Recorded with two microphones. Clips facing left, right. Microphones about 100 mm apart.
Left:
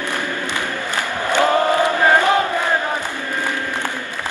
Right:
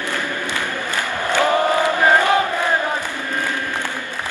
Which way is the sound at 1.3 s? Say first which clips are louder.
Left 1 dB; 20° left (ahead or behind).